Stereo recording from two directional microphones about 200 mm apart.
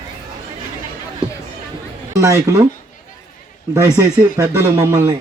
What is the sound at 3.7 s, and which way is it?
Speech, 15° right (ahead or behind).